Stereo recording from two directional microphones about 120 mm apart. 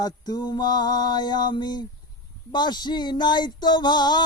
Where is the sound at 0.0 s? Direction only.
35° left (ahead or behind).